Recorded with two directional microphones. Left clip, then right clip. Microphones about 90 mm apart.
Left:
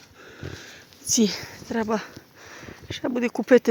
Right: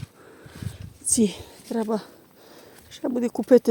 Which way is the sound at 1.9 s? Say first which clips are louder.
Left 2 dB; 30° right (ahead or behind).